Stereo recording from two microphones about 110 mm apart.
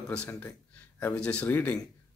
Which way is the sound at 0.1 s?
10° left (ahead or behind).